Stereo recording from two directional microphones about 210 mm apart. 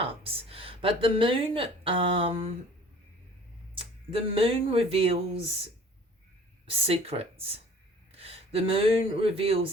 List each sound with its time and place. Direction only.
0.0 s a woman's voice: 25° right (ahead or behind)
3.8 s speech: 25° right (ahead or behind)
6.7 s speech: 25° right (ahead or behind)